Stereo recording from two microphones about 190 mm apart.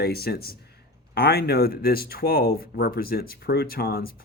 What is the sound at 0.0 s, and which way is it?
Speech, 55° left (ahead or behind).